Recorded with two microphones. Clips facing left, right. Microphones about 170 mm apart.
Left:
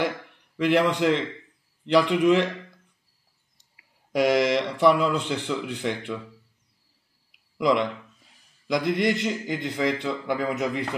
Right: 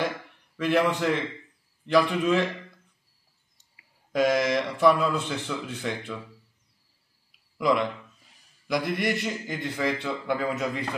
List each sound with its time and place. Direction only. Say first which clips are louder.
0.0 s a man's voice: left 2 dB; 20° left (ahead or behind)
4.1 s speech: left 2 dB; 15° left (ahead or behind)
7.5 s a man's voice: left 2 dB; 20° left (ahead or behind)